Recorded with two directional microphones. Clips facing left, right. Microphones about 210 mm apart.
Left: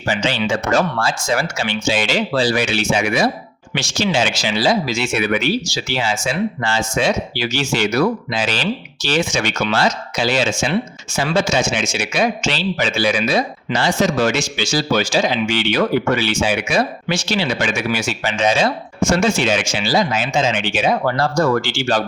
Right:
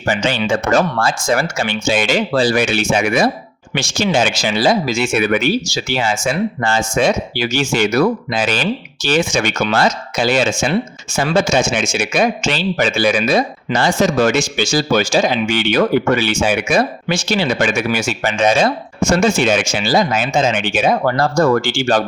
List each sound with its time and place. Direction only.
0.1 s speech: 50° right (ahead or behind)